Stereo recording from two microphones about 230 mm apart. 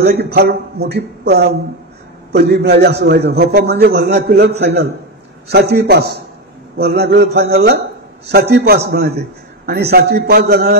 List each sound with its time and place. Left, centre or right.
0.0 s a man's voice: right